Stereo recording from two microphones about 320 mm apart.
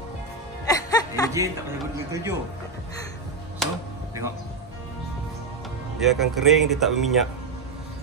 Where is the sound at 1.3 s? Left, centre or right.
Centre.